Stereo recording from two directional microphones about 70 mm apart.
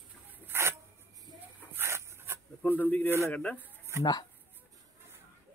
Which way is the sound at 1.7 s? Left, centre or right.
Right.